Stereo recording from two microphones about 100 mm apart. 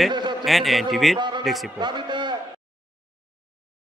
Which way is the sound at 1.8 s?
50° right (ahead or behind).